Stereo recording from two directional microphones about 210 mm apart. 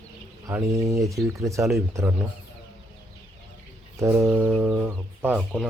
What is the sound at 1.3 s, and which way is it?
Speech, 15° right (ahead or behind).